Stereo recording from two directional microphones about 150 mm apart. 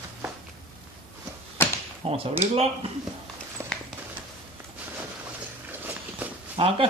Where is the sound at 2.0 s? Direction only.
40° right (ahead or behind).